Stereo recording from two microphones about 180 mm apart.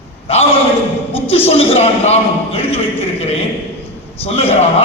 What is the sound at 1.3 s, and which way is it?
Speech, 35° left (ahead or behind).